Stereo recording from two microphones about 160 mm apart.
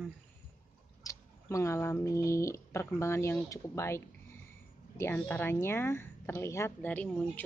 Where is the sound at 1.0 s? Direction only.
20° left (ahead or behind).